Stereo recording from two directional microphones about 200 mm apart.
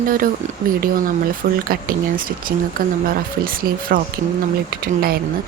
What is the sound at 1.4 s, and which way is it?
Speech, 50° right (ahead or behind).